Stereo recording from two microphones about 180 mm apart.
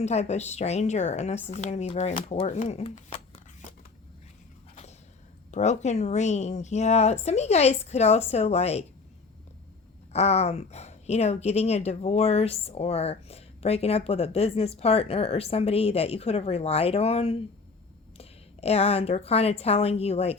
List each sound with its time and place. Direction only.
0.0 s speech: 40° left (ahead or behind)
4.7 s a sound: 35° left (ahead or behind)
5.5 s speech: 40° left (ahead or behind)
10.1 s speech: 35° left (ahead or behind)